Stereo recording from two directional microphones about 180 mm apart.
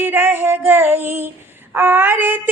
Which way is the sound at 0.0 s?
10° right (ahead or behind).